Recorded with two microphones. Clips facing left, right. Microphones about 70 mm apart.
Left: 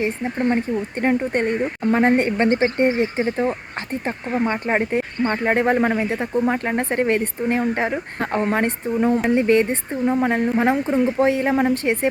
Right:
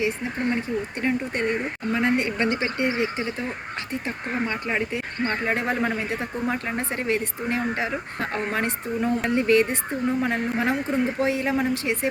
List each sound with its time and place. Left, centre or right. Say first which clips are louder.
0.0 s speech: left 4 dB; left